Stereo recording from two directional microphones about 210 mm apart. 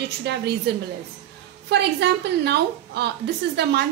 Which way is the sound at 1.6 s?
55° right (ahead or behind).